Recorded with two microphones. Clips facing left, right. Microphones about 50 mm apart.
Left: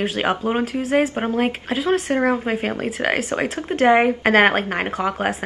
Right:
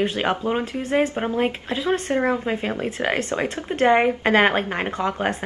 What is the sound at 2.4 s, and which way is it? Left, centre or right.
Speech, centre.